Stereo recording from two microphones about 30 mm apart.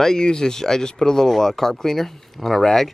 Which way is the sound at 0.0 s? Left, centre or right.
Left.